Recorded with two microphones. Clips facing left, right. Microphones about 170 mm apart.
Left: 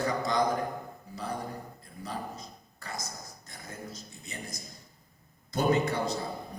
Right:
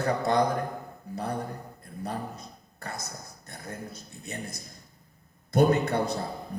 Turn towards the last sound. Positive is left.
turn(degrees=-60)  # may be behind; listen again after turning